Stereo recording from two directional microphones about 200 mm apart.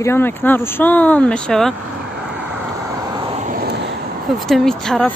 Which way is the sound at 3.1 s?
25° right (ahead or behind).